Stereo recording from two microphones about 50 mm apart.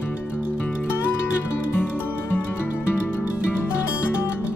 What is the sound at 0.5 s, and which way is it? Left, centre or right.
Music, left.